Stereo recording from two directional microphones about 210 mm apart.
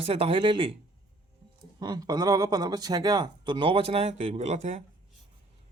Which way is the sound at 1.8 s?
20° right (ahead or behind).